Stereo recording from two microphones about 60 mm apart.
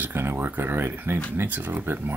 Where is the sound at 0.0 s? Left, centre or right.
Right.